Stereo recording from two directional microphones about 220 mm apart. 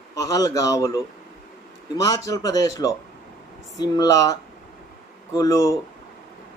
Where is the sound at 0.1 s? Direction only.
15° left (ahead or behind).